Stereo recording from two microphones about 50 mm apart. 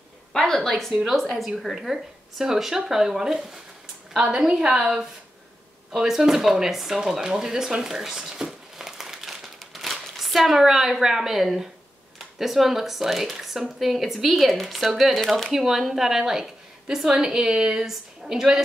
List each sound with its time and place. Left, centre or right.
0.3 s a woman's voice: centre
1.3 s speech: centre